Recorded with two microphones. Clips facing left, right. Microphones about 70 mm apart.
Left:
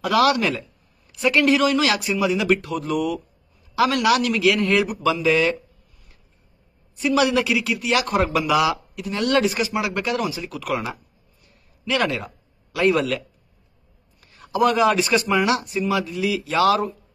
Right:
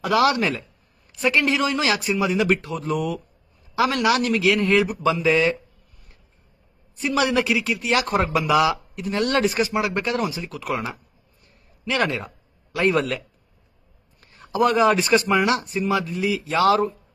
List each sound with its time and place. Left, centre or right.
0.0 s a man's voice: right
1.3 s a man's voice: right
2.6 s a man's voice: right
2.9 s speech: right
3.7 s a man's voice: right
7.0 s a man's voice: right
14.2 s speech: right